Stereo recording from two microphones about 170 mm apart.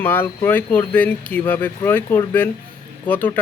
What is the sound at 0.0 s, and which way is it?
Speech, 10° left (ahead or behind).